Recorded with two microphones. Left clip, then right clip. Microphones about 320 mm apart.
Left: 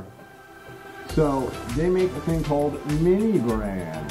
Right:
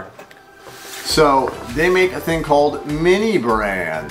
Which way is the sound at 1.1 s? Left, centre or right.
Centre.